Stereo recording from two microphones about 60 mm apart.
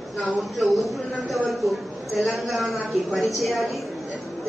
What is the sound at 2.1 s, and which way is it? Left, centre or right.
A woman's voice, centre.